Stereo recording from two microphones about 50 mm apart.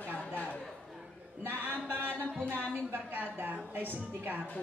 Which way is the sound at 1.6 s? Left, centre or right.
Right.